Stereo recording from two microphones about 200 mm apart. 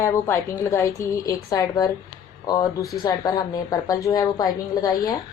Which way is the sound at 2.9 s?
20° left (ahead or behind).